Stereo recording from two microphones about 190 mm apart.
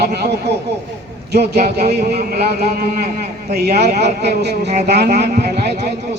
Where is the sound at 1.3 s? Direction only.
60° right (ahead or behind).